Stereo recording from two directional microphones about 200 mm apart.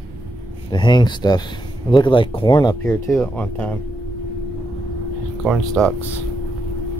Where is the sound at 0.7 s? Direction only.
20° left (ahead or behind).